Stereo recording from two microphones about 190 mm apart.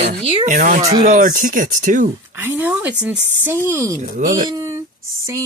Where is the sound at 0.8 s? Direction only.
15° right (ahead or behind).